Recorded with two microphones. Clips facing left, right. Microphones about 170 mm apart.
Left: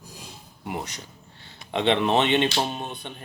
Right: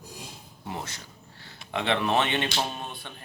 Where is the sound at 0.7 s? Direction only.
15° left (ahead or behind).